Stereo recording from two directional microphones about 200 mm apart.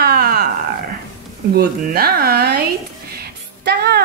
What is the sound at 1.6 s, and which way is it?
Speech, 50° right (ahead or behind).